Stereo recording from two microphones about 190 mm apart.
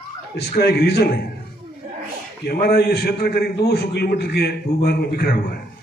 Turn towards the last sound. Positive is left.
turn(degrees=55)  # may be behind; listen again after turning